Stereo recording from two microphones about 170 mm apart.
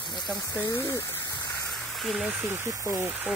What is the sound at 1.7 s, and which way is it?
Speech, centre (ahead or behind).